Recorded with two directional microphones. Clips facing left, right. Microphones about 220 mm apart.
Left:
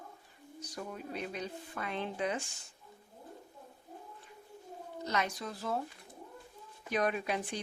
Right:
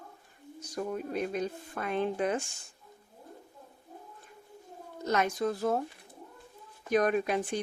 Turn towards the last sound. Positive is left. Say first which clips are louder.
# right 7 dB
turn(degrees=-45)  # may be behind; listen again after turning